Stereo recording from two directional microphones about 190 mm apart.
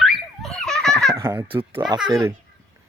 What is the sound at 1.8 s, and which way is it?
Speech, 20° right (ahead or behind).